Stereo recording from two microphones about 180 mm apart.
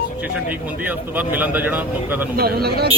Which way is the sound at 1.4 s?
10° right (ahead or behind).